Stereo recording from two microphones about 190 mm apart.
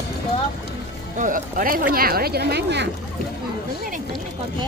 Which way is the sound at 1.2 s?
45° right (ahead or behind).